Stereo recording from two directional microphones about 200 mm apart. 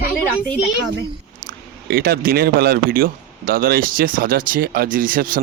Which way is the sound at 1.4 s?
50° right (ahead or behind).